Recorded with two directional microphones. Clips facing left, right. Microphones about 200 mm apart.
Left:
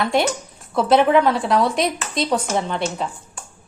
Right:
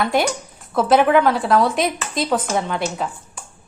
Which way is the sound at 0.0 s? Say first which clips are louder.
Even; centre (ahead or behind).